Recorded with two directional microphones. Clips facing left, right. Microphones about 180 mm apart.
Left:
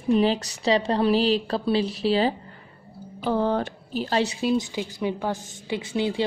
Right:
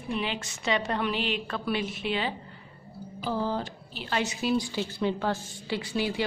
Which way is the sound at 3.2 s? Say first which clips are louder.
Left 6 dB; 60° left (ahead or behind).